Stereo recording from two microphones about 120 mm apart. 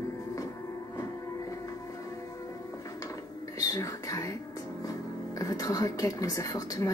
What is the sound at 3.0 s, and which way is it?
Music, 30° left (ahead or behind).